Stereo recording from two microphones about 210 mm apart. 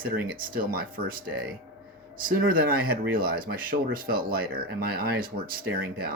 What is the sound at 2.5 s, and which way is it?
Speech, 45° right (ahead or behind).